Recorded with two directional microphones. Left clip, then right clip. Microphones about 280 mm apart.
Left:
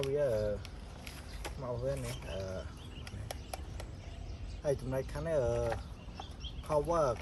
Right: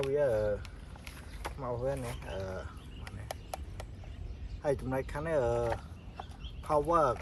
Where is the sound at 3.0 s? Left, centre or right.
Centre.